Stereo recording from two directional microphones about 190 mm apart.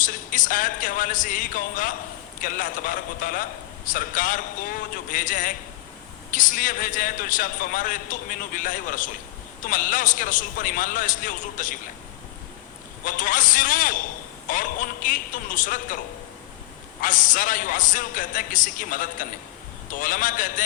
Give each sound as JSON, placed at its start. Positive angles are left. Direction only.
{"t": 0.0, "sound": "a man's voice", "side_deg": 45}
{"t": 13.1, "sound": "a man's voice", "side_deg": 45}
{"t": 17.0, "sound": "a man's voice", "side_deg": 45}